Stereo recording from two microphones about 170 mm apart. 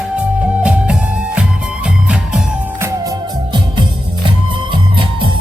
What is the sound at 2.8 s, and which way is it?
Music, 25° right (ahead or behind).